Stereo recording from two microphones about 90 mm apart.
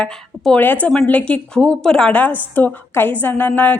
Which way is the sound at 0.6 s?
20° left (ahead or behind).